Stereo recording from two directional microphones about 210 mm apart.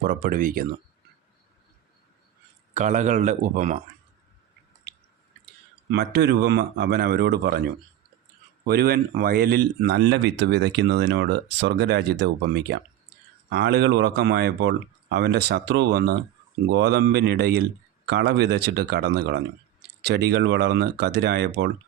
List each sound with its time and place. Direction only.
0.0 s speech: 40° right (ahead or behind)
2.7 s speech: 35° right (ahead or behind)
5.9 s speech: 50° right (ahead or behind)
8.6 s speech: 50° right (ahead or behind)